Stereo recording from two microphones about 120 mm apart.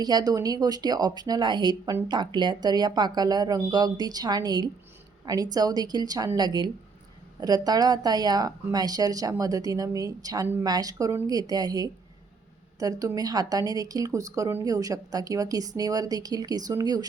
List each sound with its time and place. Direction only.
0.0 s speech: 35° right (ahead or behind)